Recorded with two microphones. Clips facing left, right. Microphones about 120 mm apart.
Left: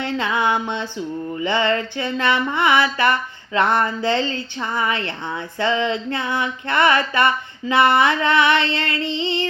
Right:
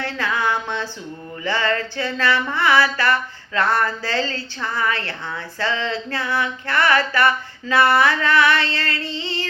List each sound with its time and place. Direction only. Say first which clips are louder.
0.0 s mantra: left 2 dB; 20° left (ahead or behind)